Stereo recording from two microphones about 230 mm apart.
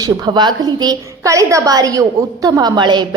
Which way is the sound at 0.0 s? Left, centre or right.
Centre.